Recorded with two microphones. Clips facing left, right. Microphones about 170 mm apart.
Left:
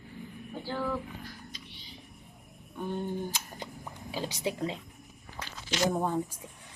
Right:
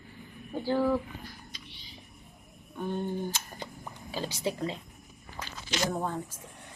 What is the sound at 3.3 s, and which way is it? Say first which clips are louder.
Speech: right 1 dB; 10° left (ahead or behind).